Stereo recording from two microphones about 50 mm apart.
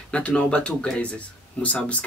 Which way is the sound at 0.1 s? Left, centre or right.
Left.